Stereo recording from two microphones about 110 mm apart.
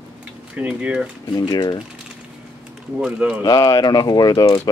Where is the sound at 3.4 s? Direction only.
40° left (ahead or behind).